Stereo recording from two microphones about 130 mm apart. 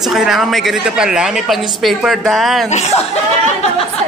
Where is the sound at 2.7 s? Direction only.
55° left (ahead or behind).